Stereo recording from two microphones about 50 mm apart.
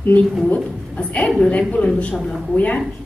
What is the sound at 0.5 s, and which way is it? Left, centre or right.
A woman's voice, left.